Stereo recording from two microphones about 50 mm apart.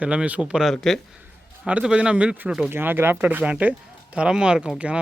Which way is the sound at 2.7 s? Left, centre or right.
Right.